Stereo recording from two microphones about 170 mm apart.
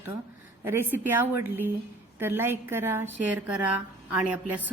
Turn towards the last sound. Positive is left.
turn(degrees=-10)  # may be behind; listen again after turning